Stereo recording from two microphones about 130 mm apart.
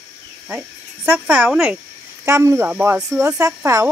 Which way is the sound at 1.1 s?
10° right (ahead or behind).